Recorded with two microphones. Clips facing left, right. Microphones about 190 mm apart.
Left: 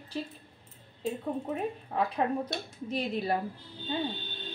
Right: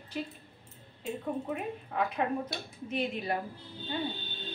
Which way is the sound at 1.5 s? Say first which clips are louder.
Left 2 dB; 35° left (ahead or behind).